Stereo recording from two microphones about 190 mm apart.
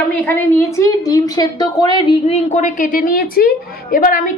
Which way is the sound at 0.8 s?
20° left (ahead or behind).